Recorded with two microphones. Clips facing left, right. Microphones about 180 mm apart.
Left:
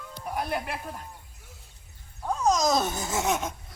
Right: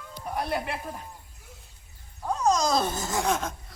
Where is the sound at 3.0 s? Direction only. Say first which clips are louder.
Even; 20° left (ahead or behind).